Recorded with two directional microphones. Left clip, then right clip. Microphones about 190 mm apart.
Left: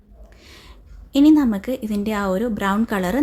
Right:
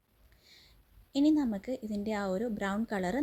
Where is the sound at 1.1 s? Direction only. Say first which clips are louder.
Left 13 dB; 20° right (ahead or behind).